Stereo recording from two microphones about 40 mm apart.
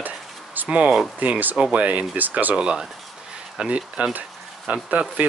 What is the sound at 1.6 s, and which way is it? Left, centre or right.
Speech, right.